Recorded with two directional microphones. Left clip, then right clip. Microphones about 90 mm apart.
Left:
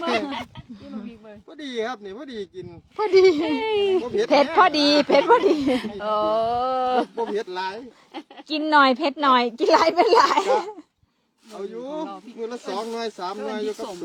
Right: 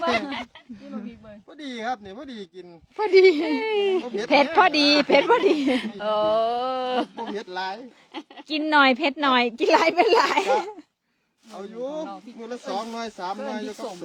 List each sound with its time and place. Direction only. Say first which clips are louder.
0.9 s a sound: even; 30° right (ahead or behind)
1.5 s speech: left 1 dB; 20° right (ahead or behind)
2.9 s a woman's voice: even; 10° right (ahead or behind)
3.7 s speech: left 2 dB; 5° left (ahead or behind)
4.1 s a woman's voice: even; 20° right (ahead or behind)
7.5 s speech: left 1 dB; 25° right (ahead or behind)
8.1 s a woman's voice: left 1 dB; 15° right (ahead or behind)
13.7 s speech: left 4 dB; centre (ahead or behind)